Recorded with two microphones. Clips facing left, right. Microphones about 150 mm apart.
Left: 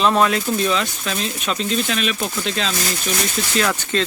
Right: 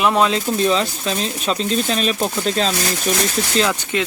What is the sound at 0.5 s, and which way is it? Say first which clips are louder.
Speech: right 3 dB; 35° right (ahead or behind).